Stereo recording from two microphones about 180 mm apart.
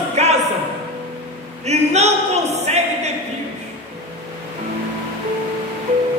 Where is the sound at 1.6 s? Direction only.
35° right (ahead or behind).